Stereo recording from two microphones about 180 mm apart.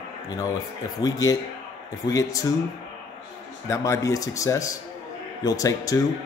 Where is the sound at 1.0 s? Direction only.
20° left (ahead or behind).